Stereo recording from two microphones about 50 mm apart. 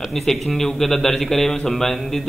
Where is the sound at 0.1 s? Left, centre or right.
Centre.